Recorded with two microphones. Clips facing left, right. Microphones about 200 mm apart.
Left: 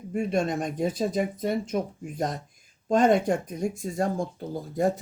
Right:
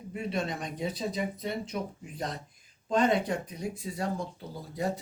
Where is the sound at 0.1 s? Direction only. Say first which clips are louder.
Left 7 dB; 50° left (ahead or behind).